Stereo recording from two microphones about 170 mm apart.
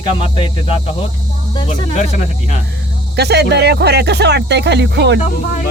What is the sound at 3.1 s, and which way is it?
Speech, 75° right (ahead or behind).